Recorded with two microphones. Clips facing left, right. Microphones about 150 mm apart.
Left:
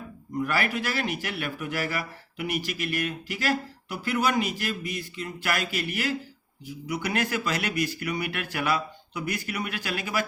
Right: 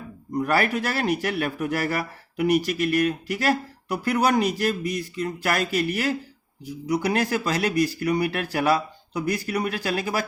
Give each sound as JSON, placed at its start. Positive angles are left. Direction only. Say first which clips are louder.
{"t": 0.3, "sound": "speech", "louder": "right 5 dB", "side_deg": -40}